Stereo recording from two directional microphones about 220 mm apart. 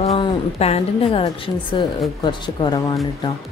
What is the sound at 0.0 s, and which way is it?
A woman's voice, 30° left (ahead or behind).